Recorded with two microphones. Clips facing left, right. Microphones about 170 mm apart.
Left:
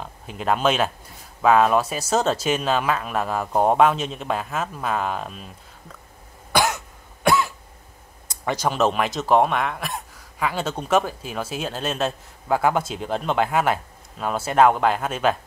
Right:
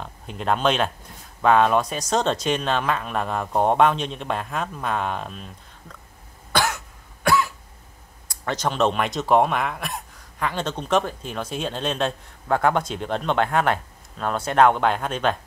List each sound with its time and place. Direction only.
0.0 s speech: 5° left (ahead or behind)
6.5 s cough: 15° left (ahead or behind)
8.3 s speech: 10° left (ahead or behind)